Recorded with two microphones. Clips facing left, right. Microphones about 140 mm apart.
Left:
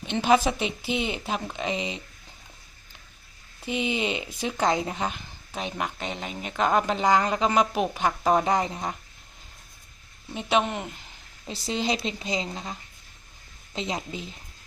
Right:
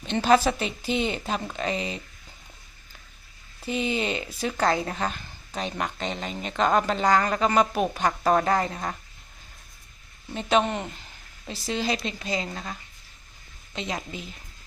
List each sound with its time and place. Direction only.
0.1 s a woman's voice: 10° left (ahead or behind)
3.7 s a woman's voice: 15° left (ahead or behind)
10.3 s a woman's voice: 10° left (ahead or behind)
11.7 s speech: 25° left (ahead or behind)
13.7 s speech: 25° left (ahead or behind)